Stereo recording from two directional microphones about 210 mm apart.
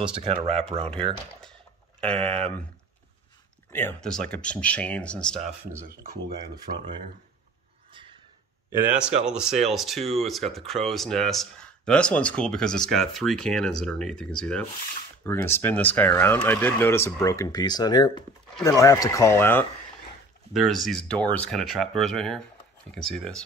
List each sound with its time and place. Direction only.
0.0 s speech: 25° right (ahead or behind)
2.0 s speech: 25° right (ahead or behind)
3.7 s speech: 5° left (ahead or behind)
5.9 s speech: 45° right (ahead or behind)
6.5 s speech: 20° right (ahead or behind)
8.9 s speech: 5° right (ahead or behind)
20.5 s speech: centre (ahead or behind)